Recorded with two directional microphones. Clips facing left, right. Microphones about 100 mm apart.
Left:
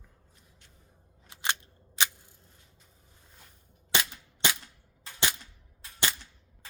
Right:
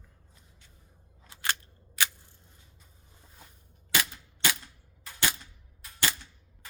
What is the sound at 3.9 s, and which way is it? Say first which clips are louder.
Cap gun: even; 20° left (ahead or behind).